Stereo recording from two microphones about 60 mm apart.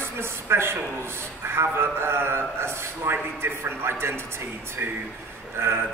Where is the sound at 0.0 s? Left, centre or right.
Right.